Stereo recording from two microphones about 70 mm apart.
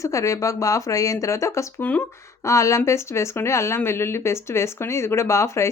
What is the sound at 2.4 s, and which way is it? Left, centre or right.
Speech, left.